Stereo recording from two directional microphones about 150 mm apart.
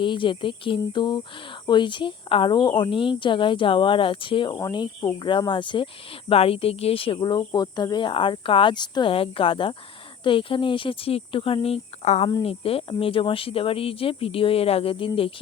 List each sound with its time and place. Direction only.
0.0 s a woman's voice: 35° left (ahead or behind)